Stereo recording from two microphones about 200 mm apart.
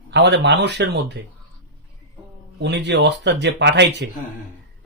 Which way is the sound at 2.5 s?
55° right (ahead or behind).